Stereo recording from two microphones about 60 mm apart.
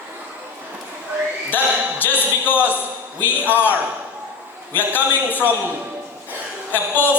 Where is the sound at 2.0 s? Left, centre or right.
Left.